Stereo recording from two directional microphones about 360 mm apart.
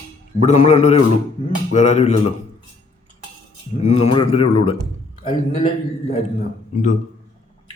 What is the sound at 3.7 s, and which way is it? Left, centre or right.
A man's voice, centre.